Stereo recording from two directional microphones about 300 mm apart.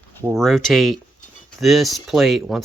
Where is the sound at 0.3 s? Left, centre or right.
Centre.